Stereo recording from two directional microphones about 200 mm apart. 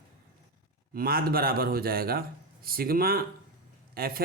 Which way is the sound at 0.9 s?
50° right (ahead or behind).